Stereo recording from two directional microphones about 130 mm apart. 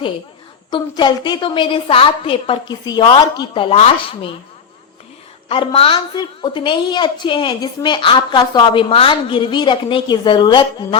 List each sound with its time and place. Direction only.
0.7 s a woman's voice: 35° left (ahead or behind)
5.5 s a woman's voice: 45° left (ahead or behind)